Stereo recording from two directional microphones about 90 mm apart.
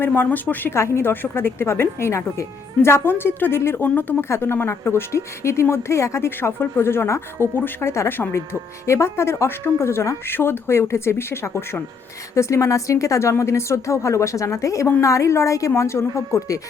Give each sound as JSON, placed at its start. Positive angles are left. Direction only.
{"t": 0.0, "sound": "a woman's voice", "side_deg": 20}